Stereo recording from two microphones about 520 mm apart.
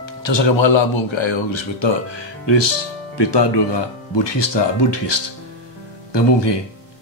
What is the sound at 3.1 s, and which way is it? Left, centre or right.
Speech, left.